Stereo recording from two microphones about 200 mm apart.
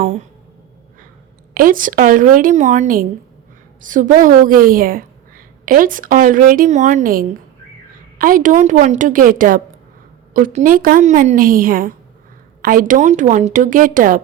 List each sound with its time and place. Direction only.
1.5 s a woman's voice: 45° right (ahead or behind)